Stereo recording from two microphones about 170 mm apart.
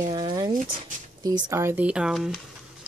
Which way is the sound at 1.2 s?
15° right (ahead or behind).